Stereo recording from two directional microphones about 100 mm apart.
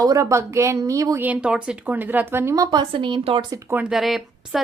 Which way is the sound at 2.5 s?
35° right (ahead or behind).